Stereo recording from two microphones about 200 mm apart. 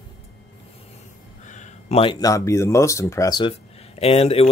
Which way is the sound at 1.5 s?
35° left (ahead or behind).